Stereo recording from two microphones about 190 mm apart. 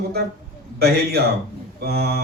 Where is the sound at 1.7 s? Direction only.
55° right (ahead or behind).